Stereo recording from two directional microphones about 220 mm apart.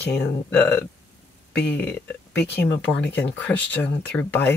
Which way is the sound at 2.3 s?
50° left (ahead or behind).